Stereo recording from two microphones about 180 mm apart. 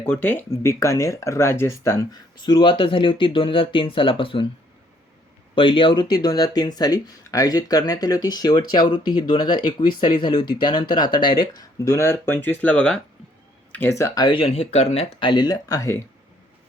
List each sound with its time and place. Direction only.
0.0 s speech: 10° left (ahead or behind); by 4.4 s 30° left (ahead or behind)
5.5 s speech: 30° left (ahead or behind)